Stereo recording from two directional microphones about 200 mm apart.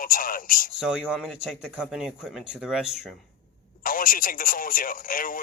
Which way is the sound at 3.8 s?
45° left (ahead or behind).